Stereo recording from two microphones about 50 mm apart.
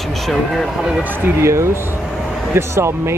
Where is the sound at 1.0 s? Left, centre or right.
Right.